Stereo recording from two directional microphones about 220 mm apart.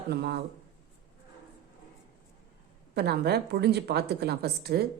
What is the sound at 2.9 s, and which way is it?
Speech, 45° right (ahead or behind).